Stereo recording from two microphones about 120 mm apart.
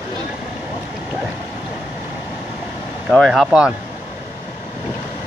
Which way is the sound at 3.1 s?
Centre (ahead or behind).